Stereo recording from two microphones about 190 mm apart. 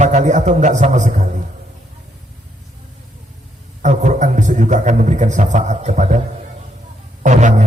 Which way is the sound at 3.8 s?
40° right (ahead or behind).